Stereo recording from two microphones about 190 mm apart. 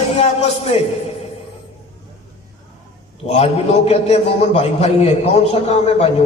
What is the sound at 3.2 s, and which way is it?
A man's voice, 35° left (ahead or behind).